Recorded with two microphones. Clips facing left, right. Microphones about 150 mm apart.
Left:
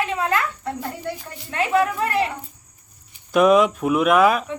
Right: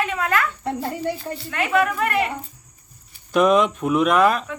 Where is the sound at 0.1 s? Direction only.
25° left (ahead or behind).